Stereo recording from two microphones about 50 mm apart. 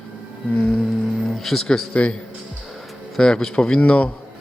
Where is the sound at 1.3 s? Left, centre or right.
Centre.